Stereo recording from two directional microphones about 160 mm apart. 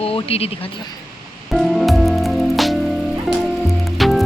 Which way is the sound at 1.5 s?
Centre (ahead or behind).